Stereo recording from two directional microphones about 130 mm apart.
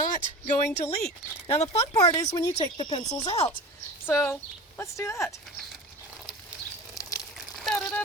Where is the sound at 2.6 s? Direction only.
35° left (ahead or behind).